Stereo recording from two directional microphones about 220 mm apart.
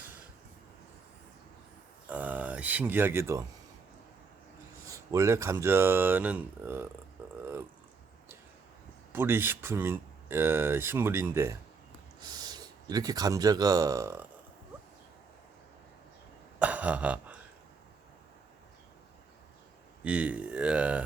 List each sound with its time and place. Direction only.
2.0 s speech: 5° right (ahead or behind)
4.9 s speech: 15° right (ahead or behind)
9.1 s speech: 10° right (ahead or behind)
16.6 s a sound: 5° right (ahead or behind)
20.1 s speech: 5° right (ahead or behind)